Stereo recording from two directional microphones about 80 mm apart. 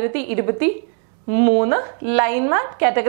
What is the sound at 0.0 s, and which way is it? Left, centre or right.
A woman's voice, centre.